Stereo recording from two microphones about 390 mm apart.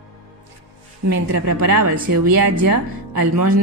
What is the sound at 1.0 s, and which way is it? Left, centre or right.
Speech, right.